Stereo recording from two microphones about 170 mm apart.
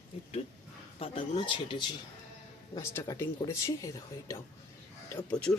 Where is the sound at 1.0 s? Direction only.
30° left (ahead or behind).